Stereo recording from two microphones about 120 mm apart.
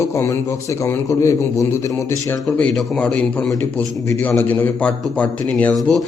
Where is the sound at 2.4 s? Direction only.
5° left (ahead or behind).